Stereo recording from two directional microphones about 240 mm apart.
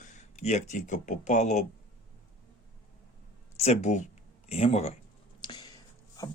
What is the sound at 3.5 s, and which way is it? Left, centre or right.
Speech, left.